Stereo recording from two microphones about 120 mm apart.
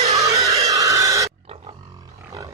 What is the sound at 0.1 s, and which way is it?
Neigh, 30° right (ahead or behind).